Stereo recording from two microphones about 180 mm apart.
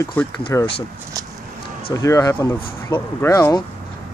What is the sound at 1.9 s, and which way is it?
Speech, 20° left (ahead or behind).